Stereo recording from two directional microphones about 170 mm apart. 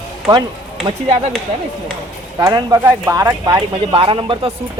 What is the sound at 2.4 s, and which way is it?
Speech, 20° right (ahead or behind).